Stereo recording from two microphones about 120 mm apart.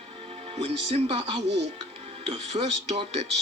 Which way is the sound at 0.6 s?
65° right (ahead or behind).